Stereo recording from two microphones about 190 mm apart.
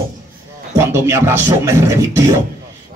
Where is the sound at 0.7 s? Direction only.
15° right (ahead or behind).